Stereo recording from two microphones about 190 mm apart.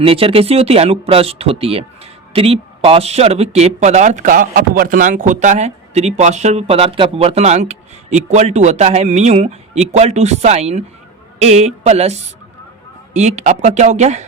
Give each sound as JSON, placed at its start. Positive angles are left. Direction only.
{"t": 0.0, "sound": "speech", "side_deg": -30}